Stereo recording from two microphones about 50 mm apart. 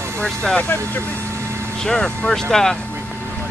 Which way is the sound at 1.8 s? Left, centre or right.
Centre.